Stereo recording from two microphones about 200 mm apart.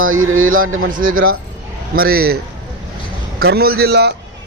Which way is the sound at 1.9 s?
50° right (ahead or behind).